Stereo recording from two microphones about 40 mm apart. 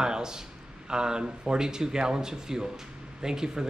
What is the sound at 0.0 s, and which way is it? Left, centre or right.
A man's voice, centre.